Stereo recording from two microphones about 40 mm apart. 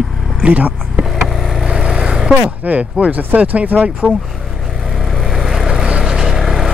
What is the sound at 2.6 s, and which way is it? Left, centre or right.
Speech, right.